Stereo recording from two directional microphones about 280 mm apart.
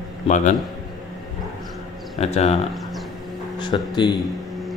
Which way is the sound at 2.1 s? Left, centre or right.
Left.